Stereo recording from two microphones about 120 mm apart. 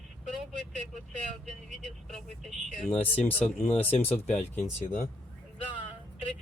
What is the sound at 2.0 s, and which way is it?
Speech, 5° left (ahead or behind).